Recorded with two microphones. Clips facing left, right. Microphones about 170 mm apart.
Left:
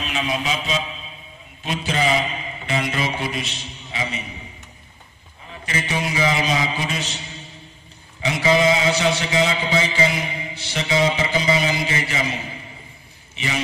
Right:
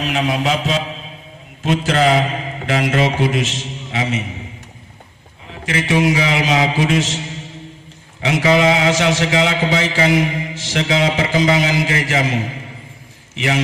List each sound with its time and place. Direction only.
0.0 s music: 75° right (ahead or behind)
1.6 s a man's voice: 85° right
5.5 s a man's voice: 80° right